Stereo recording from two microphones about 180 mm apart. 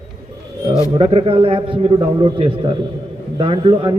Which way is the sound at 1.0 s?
30° right (ahead or behind).